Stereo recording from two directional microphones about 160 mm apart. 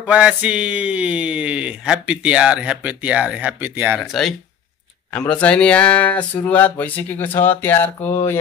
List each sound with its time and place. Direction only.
0.0 s speech: 10° right (ahead or behind)
4.0 s speech: centre (ahead or behind)